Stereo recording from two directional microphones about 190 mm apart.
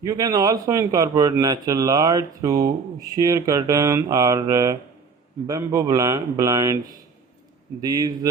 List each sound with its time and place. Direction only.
0.0 s a man's voice: 15° right (ahead or behind)